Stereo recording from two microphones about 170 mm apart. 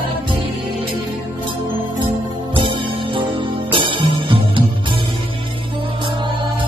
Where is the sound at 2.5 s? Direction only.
30° right (ahead or behind).